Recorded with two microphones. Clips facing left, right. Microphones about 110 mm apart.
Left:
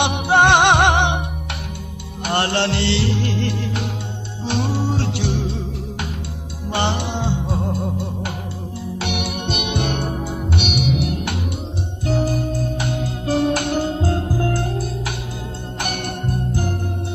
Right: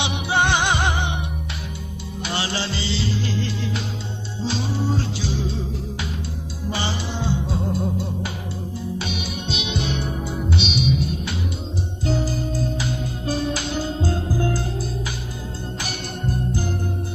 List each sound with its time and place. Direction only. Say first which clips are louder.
0.0 s music: left 6 dB; 55° left (ahead or behind)
2.2 s music: left 7 dB; 55° left (ahead or behind)
6.7 s music: left 5 dB; 65° left (ahead or behind)
9.0 s music: left 4 dB; 65° left (ahead or behind)